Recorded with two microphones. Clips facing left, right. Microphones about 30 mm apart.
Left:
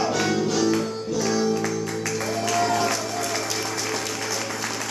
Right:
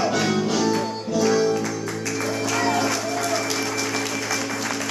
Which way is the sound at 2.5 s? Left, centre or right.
Centre.